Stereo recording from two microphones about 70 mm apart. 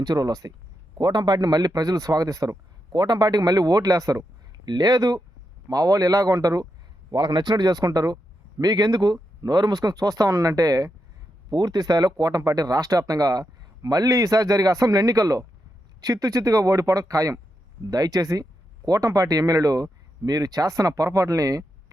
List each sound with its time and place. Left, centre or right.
0.0 s a man's voice: right
0.9 s a man's voice: right
2.9 s a man's voice: right
4.6 s a man's voice: right
7.3 s speech: right
9.4 s speech: right